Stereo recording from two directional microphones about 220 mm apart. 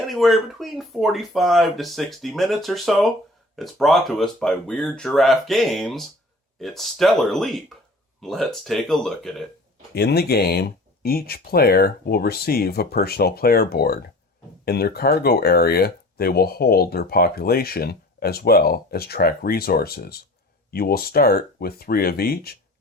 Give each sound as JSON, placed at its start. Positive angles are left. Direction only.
{"t": 0.1, "sound": "speech", "side_deg": 0}
{"t": 9.9, "sound": "speech", "side_deg": 45}